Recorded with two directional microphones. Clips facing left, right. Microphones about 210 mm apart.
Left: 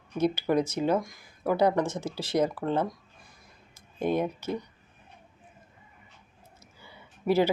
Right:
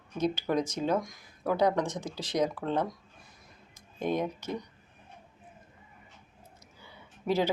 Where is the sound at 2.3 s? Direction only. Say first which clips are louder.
Left 3 dB; 5° left (ahead or behind).